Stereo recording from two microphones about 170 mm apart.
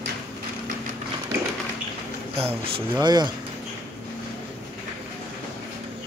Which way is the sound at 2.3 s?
35° right (ahead or behind).